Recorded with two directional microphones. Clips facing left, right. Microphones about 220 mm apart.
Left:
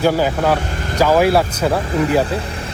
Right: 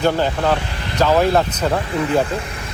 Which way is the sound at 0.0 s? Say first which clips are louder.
Left 2 dB; 10° left (ahead or behind).